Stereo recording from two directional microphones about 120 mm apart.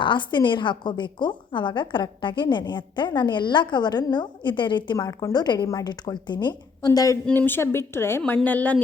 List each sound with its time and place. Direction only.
0.0 s a woman's voice: 40° left (ahead or behind)
4.9 s a woman's voice: 30° left (ahead or behind)
7.3 s a woman's voice: 20° left (ahead or behind)